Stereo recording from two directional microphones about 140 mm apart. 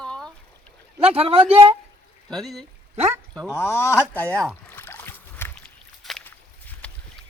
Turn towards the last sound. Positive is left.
turn(degrees=10)  # may be behind; listen again after turning